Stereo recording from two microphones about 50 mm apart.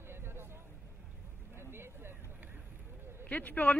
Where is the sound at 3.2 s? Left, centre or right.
Left.